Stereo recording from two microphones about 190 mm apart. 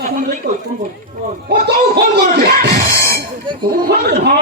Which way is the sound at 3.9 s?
55° right (ahead or behind).